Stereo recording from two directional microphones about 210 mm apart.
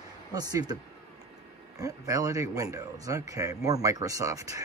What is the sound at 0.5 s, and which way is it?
Speech, 20° right (ahead or behind).